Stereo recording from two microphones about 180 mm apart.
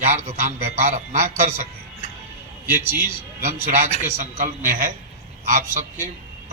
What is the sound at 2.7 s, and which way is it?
Speech, 10° right (ahead or behind).